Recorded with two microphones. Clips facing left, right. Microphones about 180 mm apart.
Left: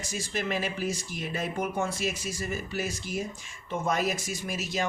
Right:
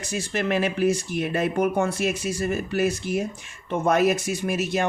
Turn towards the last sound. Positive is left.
turn(degrees=-60)  # may be behind; listen again after turning